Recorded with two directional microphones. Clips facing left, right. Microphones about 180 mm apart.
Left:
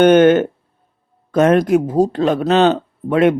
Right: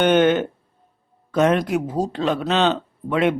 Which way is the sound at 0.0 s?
45° left (ahead or behind).